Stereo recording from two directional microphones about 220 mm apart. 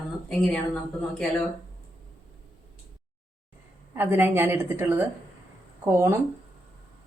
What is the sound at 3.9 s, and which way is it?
Speech, 10° right (ahead or behind).